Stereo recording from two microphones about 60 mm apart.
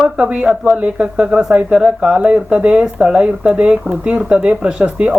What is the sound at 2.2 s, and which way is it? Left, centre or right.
Speech, right.